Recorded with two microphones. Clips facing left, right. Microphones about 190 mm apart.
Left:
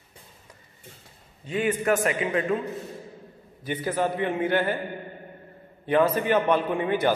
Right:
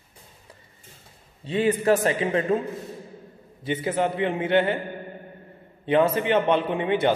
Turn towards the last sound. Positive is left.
turn(degrees=-25)  # may be behind; listen again after turning